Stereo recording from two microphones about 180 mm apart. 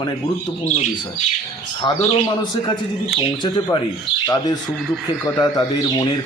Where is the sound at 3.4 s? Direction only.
25° left (ahead or behind).